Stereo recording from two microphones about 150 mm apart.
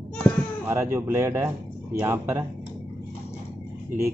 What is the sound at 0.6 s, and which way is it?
Speech, 20° right (ahead or behind).